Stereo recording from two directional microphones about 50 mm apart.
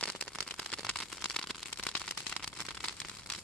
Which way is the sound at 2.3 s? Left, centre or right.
Left.